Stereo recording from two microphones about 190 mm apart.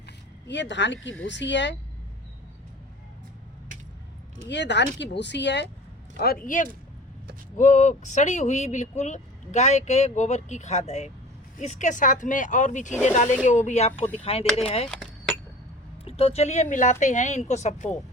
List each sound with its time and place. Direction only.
0.4 s speech: 70° left (ahead or behind)
4.4 s speech: 65° left (ahead or behind)
6.1 s speech: 50° left (ahead or behind); by 14.8 s 30° left (ahead or behind)
16.0 s speech: 30° left (ahead or behind)